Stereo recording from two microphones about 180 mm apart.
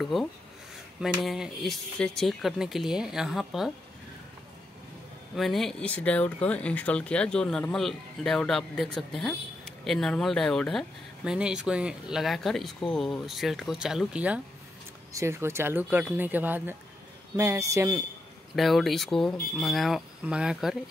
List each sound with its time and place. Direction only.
0.0 s speech: centre (ahead or behind)
5.3 s speech: centre (ahead or behind); by 18.0 s 15° right (ahead or behind)
18.6 s speech: centre (ahead or behind)